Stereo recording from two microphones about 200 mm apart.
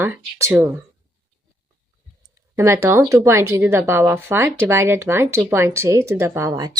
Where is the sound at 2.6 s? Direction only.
15° right (ahead or behind).